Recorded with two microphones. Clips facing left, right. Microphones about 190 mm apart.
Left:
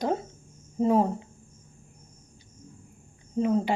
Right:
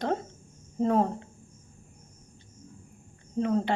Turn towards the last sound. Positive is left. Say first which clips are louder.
# left 2 dB
turn(degrees=10)  # may be behind; listen again after turning